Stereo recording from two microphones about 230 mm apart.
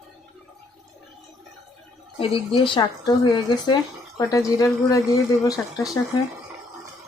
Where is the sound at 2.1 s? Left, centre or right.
Left.